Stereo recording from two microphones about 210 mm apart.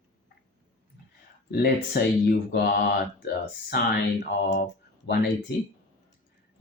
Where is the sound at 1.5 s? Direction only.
50° left (ahead or behind).